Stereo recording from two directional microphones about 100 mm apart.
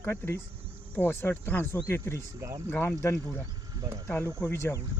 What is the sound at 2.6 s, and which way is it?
Speech, 25° left (ahead or behind).